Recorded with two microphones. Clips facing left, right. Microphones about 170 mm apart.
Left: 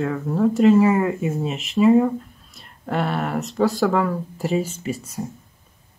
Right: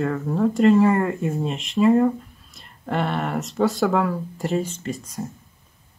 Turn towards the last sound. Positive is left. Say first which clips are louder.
# left 2 dB
turn(degrees=5)  # may be behind; listen again after turning